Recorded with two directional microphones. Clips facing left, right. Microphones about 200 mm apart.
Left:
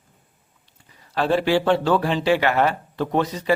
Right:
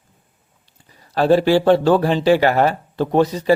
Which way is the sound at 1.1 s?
40° right (ahead or behind).